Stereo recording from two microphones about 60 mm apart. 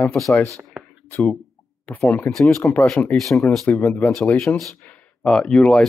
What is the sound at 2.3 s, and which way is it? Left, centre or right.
A man's voice, centre.